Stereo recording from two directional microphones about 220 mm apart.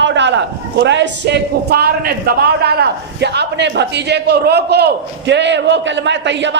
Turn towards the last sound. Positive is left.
turn(degrees=-55)  # may be behind; listen again after turning